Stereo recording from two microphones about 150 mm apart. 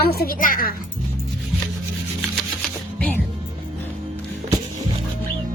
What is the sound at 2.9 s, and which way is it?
Music, 10° left (ahead or behind).